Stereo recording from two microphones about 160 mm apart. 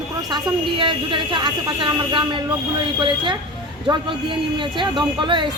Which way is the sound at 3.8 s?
30° right (ahead or behind).